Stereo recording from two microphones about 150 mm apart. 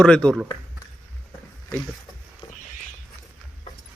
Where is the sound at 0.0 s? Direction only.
5° left (ahead or behind).